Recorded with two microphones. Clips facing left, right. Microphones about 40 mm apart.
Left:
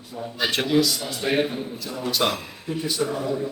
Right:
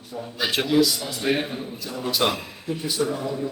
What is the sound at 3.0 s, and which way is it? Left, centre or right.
Speech, left.